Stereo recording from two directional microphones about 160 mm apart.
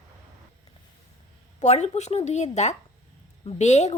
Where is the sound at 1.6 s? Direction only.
45° left (ahead or behind).